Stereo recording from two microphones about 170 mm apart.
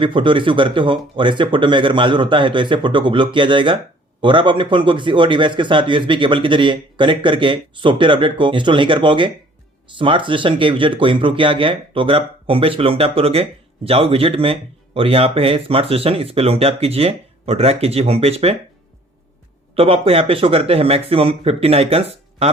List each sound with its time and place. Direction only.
0.0 s a man's voice: 30° right (ahead or behind)
19.7 s speech: 35° right (ahead or behind)